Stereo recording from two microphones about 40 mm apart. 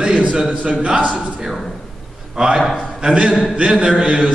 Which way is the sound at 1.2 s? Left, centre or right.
Centre.